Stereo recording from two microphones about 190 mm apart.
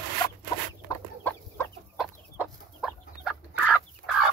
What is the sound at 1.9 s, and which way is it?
Chicken, centre (ahead or behind).